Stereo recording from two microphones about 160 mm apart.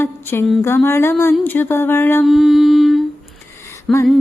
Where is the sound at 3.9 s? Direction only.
Centre (ahead or behind).